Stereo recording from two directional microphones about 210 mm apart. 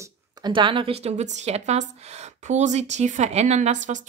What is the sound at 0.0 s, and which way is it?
A woman's voice, 20° right (ahead or behind).